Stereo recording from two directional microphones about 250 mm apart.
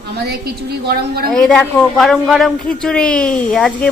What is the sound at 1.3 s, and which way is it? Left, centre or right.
Speech, centre.